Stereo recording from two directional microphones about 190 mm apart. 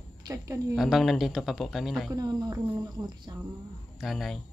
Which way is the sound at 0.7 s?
Centre (ahead or behind).